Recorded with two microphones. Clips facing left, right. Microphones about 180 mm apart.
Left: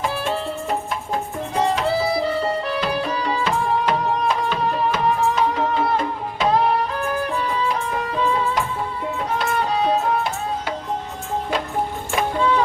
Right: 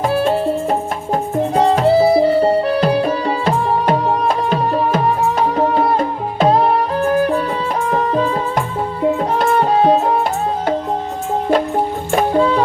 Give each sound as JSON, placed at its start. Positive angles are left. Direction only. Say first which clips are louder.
{"t": 0.0, "sound": "music", "louder": "right 8 dB", "side_deg": -45}
{"t": 7.9, "sound": "music", "louder": "right 6 dB", "side_deg": -45}
{"t": 12.1, "sound": "music", "louder": "right 6 dB", "side_deg": -40}